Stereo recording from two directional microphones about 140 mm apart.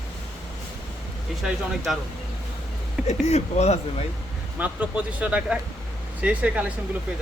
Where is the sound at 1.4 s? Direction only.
Centre (ahead or behind).